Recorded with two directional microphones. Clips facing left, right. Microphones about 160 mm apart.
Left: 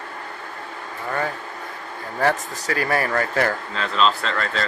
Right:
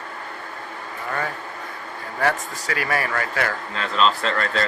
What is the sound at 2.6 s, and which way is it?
Speech, 30° left (ahead or behind).